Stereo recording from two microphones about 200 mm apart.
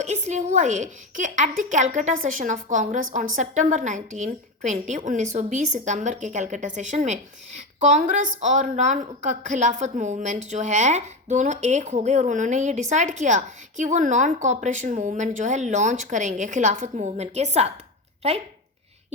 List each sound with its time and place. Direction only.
0.0 s a woman's voice: 35° right (ahead or behind)